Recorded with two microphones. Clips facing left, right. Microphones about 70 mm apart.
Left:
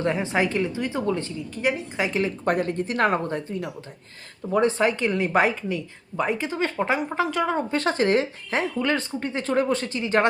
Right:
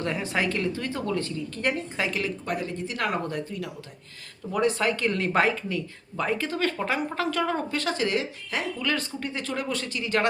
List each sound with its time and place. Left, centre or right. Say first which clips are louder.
0.0 s speech: left 4 dB; left
1.6 s a woman's voice: left 3 dB; centre
2.0 s speech: left 7 dB; left
2.4 s speech: left 7 dB; left